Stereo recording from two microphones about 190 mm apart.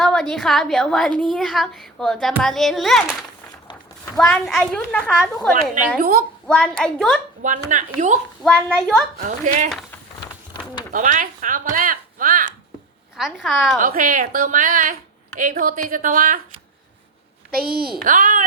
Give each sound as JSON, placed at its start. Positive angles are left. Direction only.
{"t": 0.0, "sound": "a woman's voice", "side_deg": 0}
{"t": 6.0, "sound": "a woman's voice", "side_deg": -50}
{"t": 6.5, "sound": "a woman's voice", "side_deg": 5}
{"t": 7.4, "sound": "a woman's voice", "side_deg": -40}
{"t": 9.2, "sound": "a woman's voice", "side_deg": -40}
{"t": 10.9, "sound": "speech", "side_deg": -45}
{"t": 13.1, "sound": "a woman's voice", "side_deg": 0}
{"t": 13.7, "sound": "a woman's voice", "side_deg": -45}
{"t": 17.5, "sound": "a woman's voice", "side_deg": -50}